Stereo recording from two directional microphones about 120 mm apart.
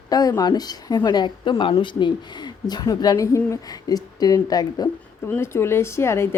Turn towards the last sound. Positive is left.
turn(degrees=20)  # may be behind; listen again after turning